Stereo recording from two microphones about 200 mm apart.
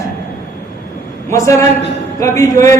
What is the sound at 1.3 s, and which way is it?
A woman's voice, 15° left (ahead or behind).